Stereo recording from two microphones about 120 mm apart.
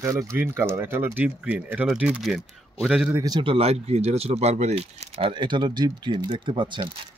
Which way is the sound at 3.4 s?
50° right (ahead or behind).